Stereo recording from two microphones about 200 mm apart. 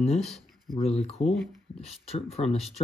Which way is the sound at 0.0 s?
30° left (ahead or behind).